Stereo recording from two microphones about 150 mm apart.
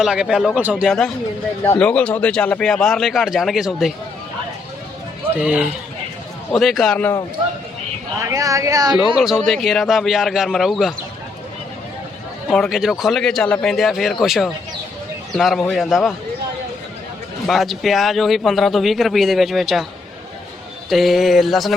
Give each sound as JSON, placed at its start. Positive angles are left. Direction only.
{"t": 0.0, "sound": "a man's voice", "side_deg": -5}
{"t": 1.8, "sound": "a man's voice", "side_deg": 10}
{"t": 5.4, "sound": "a man's voice", "side_deg": -5}
{"t": 8.2, "sound": "speech", "side_deg": -20}
{"t": 9.1, "sound": "a man's voice", "side_deg": 0}
{"t": 12.5, "sound": "a man's voice", "side_deg": 0}
{"t": 17.4, "sound": "a man's voice", "side_deg": 0}
{"t": 20.9, "sound": "a man's voice", "side_deg": 0}